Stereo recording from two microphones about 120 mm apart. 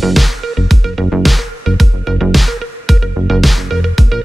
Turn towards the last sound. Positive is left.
turn(degrees=0)  # may be behind; listen again after turning